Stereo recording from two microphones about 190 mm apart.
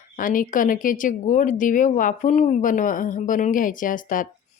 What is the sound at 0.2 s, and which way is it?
Speech, 45° left (ahead or behind).